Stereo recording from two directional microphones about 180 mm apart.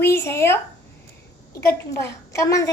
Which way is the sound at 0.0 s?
15° left (ahead or behind).